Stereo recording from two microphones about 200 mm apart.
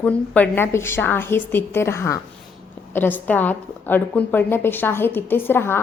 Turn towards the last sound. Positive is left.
turn(degrees=10)  # may be behind; listen again after turning